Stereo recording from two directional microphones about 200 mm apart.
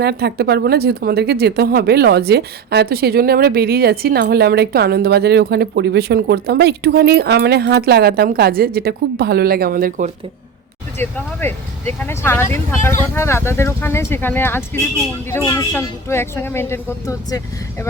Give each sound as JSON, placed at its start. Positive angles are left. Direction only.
{"t": 0.0, "sound": "speech", "side_deg": -55}
{"t": 10.9, "sound": "speech", "side_deg": 10}